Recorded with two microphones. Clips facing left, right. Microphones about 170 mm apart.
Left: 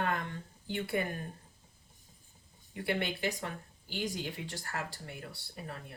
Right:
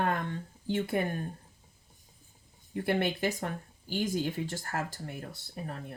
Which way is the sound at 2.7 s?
45° right (ahead or behind).